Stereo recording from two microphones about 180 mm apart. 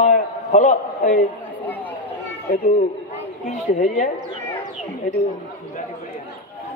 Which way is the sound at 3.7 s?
45° left (ahead or behind).